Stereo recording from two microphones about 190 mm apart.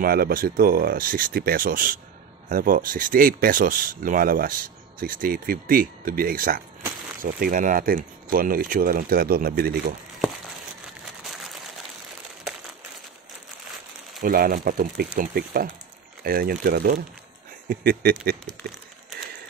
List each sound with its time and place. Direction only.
0.0 s speech: 50° right (ahead or behind)
14.2 s speech: 50° right (ahead or behind)